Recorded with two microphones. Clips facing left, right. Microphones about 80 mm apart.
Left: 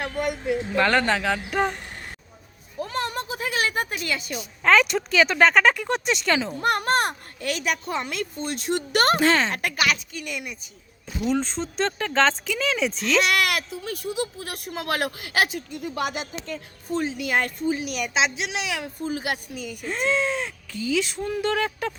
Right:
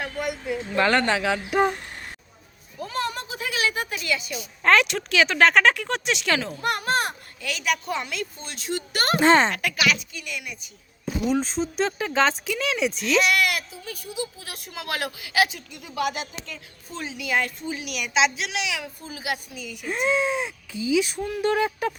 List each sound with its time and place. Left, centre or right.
0.8 s speech: centre
2.8 s a sound: left
4.6 s speech: centre
6.6 s a woman's voice: left
7.6 s a woman's voice: left
8.0 s a woman's voice: left
9.2 s a child's voice: right
9.6 s speech: left
11.3 s speech: centre
13.3 s a woman's voice: left
14.3 s a woman's voice: left
17.7 s a woman's voice: left
19.8 s speech: centre